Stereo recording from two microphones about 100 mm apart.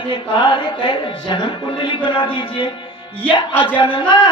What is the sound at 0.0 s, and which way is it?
Speech, 50° left (ahead or behind).